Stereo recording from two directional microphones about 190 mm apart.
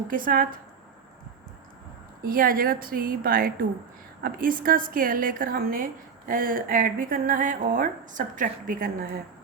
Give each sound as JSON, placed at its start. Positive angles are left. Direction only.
{"t": 0.1, "sound": "a woman's voice", "side_deg": -45}
{"t": 2.2, "sound": "a woman's voice", "side_deg": -50}